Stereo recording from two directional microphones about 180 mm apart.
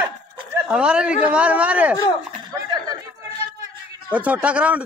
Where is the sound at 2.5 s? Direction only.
20° right (ahead or behind).